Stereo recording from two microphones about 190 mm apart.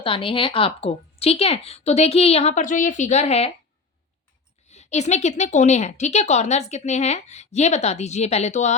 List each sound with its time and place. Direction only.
0.0 s a woman's voice: 30° left (ahead or behind)
4.7 s a woman's voice: 35° left (ahead or behind)